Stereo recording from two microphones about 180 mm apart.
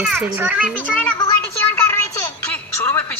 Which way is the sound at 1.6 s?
10° left (ahead or behind).